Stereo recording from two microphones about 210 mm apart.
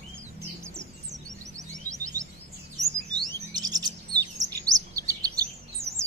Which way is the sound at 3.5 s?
20° right (ahead or behind).